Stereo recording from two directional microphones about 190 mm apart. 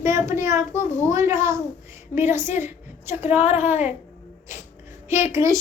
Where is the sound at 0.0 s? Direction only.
15° right (ahead or behind).